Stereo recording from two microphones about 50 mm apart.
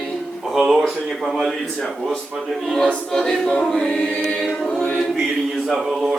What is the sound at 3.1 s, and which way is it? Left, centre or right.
Choir, centre.